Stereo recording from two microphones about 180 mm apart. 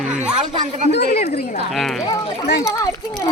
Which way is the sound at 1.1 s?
35° left (ahead or behind).